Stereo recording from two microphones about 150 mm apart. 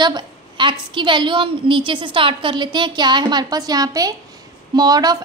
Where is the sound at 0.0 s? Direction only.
30° right (ahead or behind).